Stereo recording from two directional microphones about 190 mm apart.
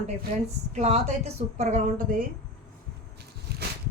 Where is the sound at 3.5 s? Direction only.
55° right (ahead or behind).